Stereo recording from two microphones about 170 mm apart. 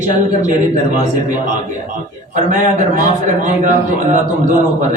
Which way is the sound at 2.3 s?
50° right (ahead or behind).